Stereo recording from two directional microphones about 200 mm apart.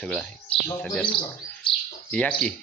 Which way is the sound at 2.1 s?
5° left (ahead or behind).